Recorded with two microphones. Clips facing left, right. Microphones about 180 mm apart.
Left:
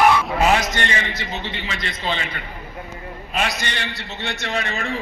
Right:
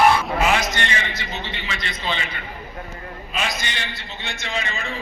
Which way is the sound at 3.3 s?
70° left (ahead or behind).